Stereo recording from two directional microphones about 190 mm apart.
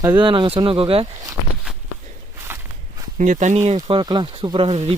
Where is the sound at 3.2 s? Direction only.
40° right (ahead or behind).